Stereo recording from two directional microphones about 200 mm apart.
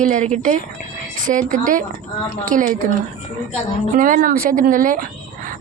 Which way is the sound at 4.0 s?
45° right (ahead or behind).